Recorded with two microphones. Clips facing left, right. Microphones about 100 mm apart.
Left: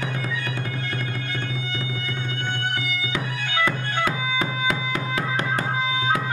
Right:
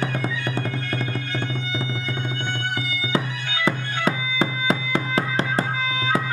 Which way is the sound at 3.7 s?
30° right (ahead or behind).